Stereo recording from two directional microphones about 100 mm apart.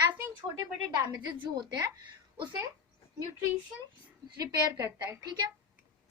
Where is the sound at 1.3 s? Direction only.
55° right (ahead or behind).